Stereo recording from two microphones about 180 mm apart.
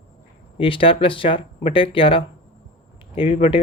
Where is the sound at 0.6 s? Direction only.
30° left (ahead or behind).